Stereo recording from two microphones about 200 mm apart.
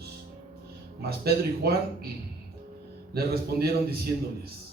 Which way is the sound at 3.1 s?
50° right (ahead or behind).